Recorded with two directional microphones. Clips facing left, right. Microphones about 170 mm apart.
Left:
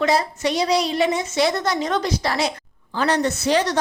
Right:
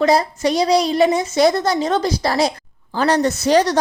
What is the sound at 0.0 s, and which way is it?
A woman's voice, 35° right (ahead or behind).